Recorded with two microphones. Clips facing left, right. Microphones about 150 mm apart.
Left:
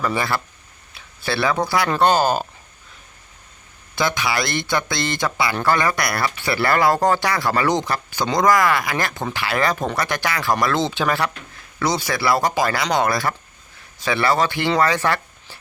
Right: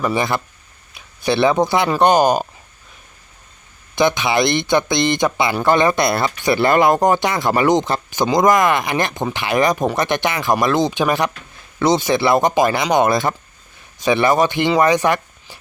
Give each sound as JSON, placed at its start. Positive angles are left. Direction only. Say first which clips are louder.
{"t": 0.0, "sound": "speech", "louder": "right 3 dB", "side_deg": -20}
{"t": 3.9, "sound": "speech", "louder": "right 6 dB", "side_deg": -20}